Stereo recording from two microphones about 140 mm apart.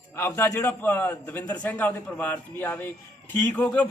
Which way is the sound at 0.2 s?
15° left (ahead or behind).